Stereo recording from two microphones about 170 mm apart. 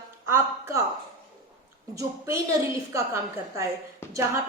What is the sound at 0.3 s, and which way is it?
Speech, 15° right (ahead or behind).